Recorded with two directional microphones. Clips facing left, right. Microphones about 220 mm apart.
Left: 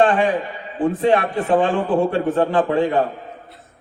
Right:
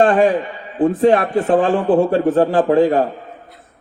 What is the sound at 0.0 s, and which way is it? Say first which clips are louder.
A man's voice: right 3 dB; 40° right (ahead or behind).